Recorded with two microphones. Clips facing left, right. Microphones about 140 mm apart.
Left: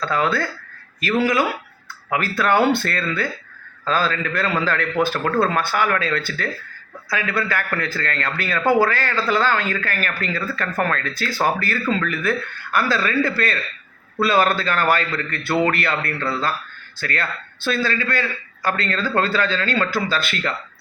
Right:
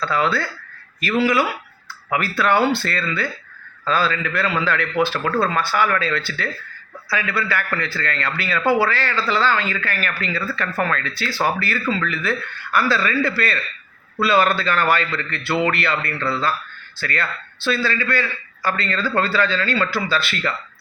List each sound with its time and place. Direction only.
0.0 s a man's voice: 45° left (ahead or behind)